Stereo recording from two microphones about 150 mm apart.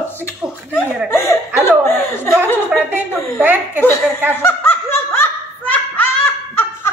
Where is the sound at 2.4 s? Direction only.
10° left (ahead or behind).